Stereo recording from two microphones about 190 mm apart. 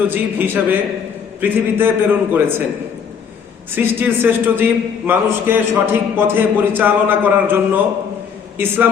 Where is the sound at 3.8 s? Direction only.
10° right (ahead or behind).